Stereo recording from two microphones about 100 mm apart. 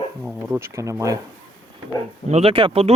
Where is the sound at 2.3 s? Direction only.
70° right (ahead or behind).